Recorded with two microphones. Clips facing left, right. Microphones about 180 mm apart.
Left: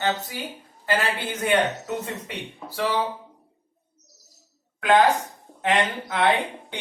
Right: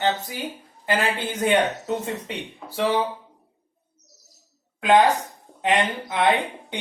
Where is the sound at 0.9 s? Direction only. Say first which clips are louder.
Right 1 dB; 20° right (ahead or behind).